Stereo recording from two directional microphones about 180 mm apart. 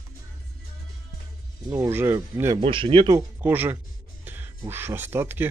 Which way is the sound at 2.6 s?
30° right (ahead or behind).